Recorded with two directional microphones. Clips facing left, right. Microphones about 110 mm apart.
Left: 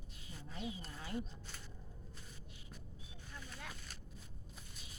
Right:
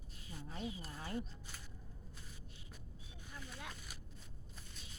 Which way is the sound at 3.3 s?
10° right (ahead or behind).